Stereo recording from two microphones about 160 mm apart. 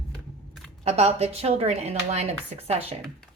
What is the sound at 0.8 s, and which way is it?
Speech, 40° right (ahead or behind).